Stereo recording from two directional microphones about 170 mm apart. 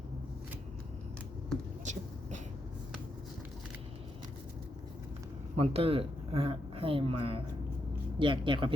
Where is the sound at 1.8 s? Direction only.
45° right (ahead or behind).